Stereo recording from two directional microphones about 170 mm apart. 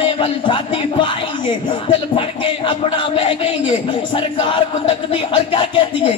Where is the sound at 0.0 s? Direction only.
30° left (ahead or behind).